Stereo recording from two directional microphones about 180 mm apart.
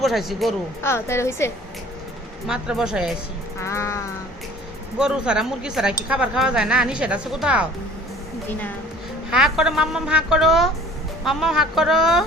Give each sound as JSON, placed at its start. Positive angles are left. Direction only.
{"t": 0.0, "sound": "speech", "side_deg": 0}
{"t": 0.8, "sound": "a woman's voice", "side_deg": 15}
{"t": 2.5, "sound": "speech", "side_deg": -5}
{"t": 3.6, "sound": "a woman's voice", "side_deg": 15}
{"t": 4.9, "sound": "speech", "side_deg": -5}
{"t": 9.3, "sound": "speech", "side_deg": -5}